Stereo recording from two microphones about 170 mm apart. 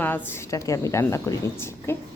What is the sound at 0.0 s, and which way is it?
Speech, 10° left (ahead or behind).